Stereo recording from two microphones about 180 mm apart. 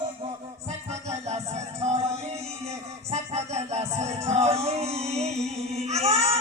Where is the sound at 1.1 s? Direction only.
35° right (ahead or behind).